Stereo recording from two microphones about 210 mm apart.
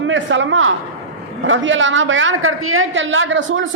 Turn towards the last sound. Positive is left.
turn(degrees=-65)  # may be behind; listen again after turning